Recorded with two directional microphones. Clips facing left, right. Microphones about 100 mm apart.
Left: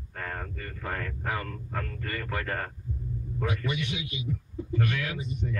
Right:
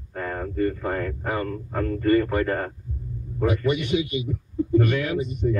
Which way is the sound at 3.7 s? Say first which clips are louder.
Right 10 dB; 45° right (ahead or behind).